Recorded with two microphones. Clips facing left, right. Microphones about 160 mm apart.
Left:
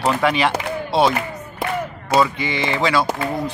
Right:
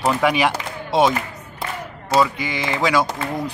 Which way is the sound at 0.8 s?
15° right (ahead or behind).